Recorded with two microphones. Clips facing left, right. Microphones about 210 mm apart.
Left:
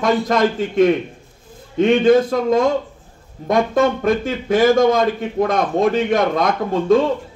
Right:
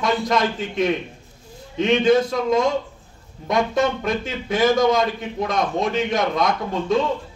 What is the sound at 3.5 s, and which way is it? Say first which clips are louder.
A man's voice: left 4 dB; 50° left (ahead or behind).